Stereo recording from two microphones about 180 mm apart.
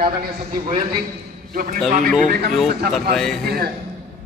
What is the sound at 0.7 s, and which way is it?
Speech, 25° right (ahead or behind).